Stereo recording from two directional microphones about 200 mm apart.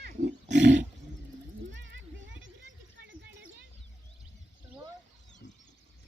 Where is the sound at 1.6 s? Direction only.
65° right (ahead or behind).